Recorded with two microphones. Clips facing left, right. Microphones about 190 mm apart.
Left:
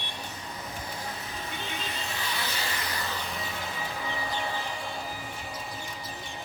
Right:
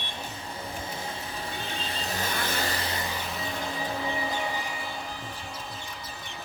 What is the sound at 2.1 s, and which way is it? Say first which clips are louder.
Vehicle: right 6 dB; 45° right (ahead or behind).